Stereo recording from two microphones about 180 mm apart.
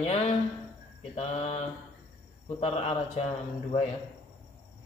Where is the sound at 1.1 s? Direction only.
40° left (ahead or behind).